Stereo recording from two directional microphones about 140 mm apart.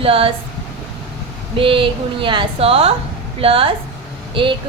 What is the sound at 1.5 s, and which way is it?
A woman's voice, 40° right (ahead or behind).